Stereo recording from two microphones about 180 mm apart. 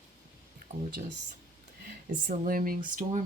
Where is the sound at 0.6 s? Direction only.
50° right (ahead or behind).